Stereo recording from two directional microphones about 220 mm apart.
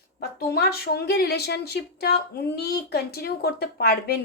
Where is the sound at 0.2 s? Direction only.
45° left (ahead or behind).